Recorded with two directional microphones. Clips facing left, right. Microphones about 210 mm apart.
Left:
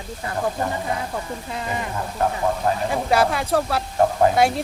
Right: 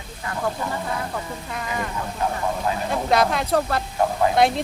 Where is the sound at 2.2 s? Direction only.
50° left (ahead or behind).